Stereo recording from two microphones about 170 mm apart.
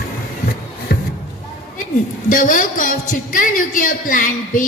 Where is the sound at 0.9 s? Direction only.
65° left (ahead or behind).